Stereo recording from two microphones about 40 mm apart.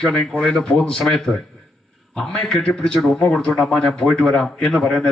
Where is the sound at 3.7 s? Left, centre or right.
Left.